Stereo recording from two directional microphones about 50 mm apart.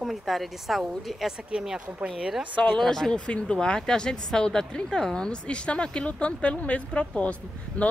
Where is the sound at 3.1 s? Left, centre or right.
Centre.